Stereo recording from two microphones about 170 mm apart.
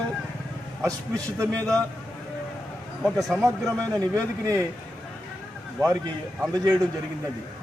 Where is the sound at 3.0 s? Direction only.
Centre (ahead or behind).